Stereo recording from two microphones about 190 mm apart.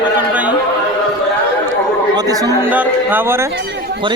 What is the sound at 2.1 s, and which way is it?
Speech, 20° right (ahead or behind).